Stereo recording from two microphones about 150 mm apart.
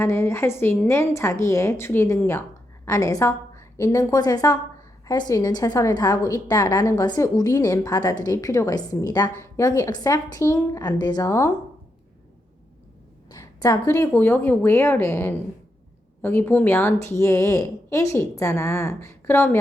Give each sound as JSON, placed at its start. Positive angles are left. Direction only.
{"t": 0.0, "sound": "a woman's voice", "side_deg": 15}
{"t": 13.3, "sound": "a woman's voice", "side_deg": 25}